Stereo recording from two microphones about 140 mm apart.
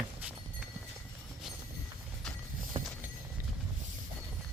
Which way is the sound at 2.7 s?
40° right (ahead or behind).